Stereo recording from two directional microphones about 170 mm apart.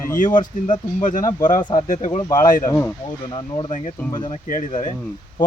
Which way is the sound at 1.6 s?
25° left (ahead or behind).